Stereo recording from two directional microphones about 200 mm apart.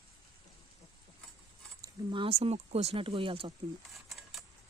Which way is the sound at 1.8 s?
25° right (ahead or behind).